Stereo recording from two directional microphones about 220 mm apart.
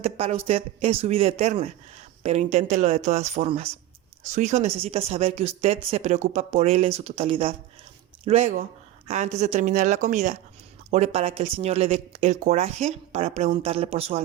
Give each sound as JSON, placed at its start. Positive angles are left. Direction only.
{"t": 0.0, "sound": "speech", "side_deg": -25}